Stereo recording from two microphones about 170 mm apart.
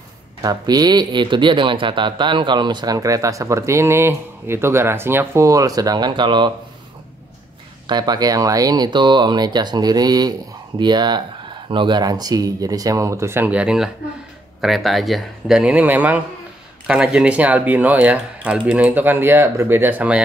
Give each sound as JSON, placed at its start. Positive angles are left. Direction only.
{"t": 0.4, "sound": "speech", "side_deg": -20}
{"t": 7.8, "sound": "speech", "side_deg": -25}